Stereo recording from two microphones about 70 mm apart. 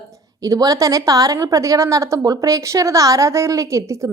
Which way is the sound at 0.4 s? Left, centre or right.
Right.